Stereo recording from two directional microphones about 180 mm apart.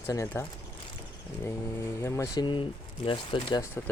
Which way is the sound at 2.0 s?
15° left (ahead or behind).